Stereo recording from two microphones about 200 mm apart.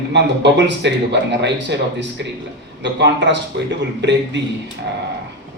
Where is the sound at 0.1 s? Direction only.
60° right (ahead or behind).